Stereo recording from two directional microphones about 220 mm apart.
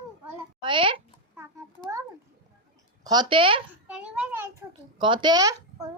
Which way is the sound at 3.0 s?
20° right (ahead or behind).